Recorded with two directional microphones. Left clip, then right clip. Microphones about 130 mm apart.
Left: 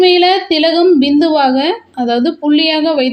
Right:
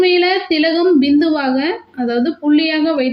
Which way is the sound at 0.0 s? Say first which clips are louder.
Left 4 dB; 20° left (ahead or behind).